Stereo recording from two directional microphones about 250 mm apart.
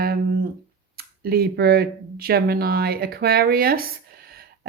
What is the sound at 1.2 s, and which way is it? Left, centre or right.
Speech, right.